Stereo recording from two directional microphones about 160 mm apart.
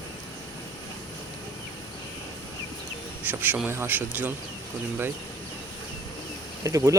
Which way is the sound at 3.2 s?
10° right (ahead or behind).